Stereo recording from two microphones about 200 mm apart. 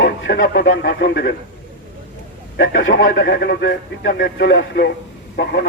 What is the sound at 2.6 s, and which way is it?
Speech, 60° left (ahead or behind).